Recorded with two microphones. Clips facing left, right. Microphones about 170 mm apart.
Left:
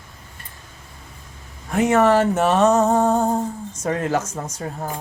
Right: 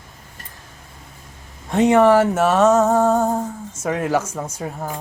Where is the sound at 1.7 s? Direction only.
15° right (ahead or behind).